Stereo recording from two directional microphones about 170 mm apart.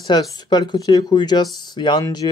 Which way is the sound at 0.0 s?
25° left (ahead or behind).